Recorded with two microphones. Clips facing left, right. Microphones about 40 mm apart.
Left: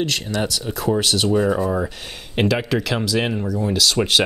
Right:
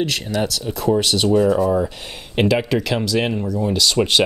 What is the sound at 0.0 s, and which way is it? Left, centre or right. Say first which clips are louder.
Speech: right 1 dB; centre.